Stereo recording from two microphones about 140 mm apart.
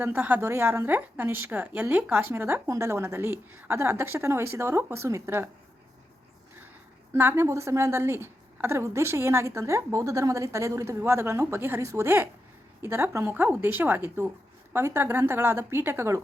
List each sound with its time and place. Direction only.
0.0 s a woman's voice: 10° right (ahead or behind)
7.1 s a woman's voice: 15° right (ahead or behind)